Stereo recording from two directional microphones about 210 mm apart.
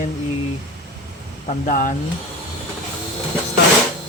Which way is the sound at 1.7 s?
40° left (ahead or behind).